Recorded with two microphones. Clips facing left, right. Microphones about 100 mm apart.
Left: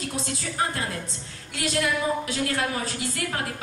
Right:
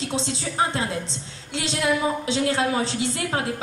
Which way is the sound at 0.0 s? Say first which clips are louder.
Right 4 dB; 25° right (ahead or behind).